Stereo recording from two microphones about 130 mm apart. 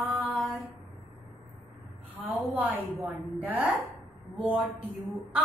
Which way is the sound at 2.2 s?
10° right (ahead or behind).